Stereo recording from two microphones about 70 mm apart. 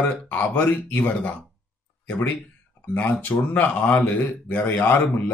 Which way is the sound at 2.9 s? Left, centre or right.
Left.